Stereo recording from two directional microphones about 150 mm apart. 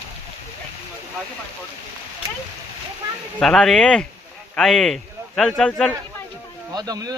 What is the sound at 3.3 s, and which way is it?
Speech, 5° left (ahead or behind).